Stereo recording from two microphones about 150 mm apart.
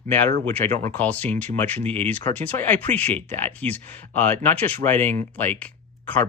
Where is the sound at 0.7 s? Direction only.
55° right (ahead or behind).